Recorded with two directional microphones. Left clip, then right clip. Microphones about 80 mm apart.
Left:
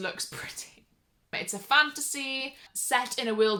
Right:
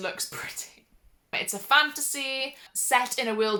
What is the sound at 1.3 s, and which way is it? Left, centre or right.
Speech, centre.